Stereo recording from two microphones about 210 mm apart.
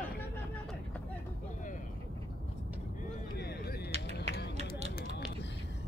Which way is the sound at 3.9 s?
30° right (ahead or behind).